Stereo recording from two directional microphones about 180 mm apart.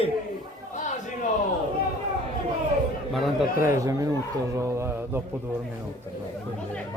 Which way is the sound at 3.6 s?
15° right (ahead or behind).